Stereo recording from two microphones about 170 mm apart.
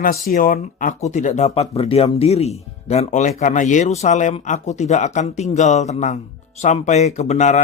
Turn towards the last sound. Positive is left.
turn(degrees=45)  # may be behind; listen again after turning